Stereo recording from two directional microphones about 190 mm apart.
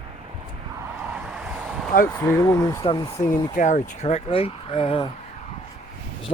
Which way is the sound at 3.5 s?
40° left (ahead or behind).